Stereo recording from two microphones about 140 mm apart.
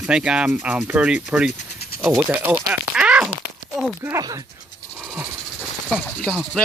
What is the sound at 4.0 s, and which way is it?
Speech, 20° right (ahead or behind).